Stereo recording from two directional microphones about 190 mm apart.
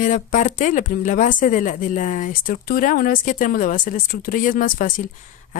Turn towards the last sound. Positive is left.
turn(degrees=45)  # may be behind; listen again after turning